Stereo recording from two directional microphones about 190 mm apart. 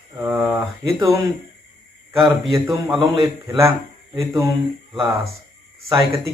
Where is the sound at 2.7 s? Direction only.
10° right (ahead or behind).